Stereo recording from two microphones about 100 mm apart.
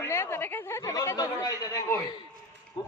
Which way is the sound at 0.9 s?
35° left (ahead or behind).